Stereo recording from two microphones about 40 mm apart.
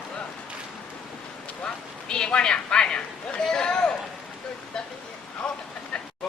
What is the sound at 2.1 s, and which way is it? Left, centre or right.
Speech, left.